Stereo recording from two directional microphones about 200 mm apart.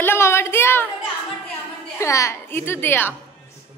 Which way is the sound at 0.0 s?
10° left (ahead or behind).